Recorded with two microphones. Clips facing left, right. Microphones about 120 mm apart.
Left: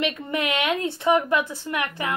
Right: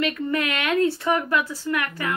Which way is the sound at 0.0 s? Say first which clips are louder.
Right 2 dB; 20° left (ahead or behind).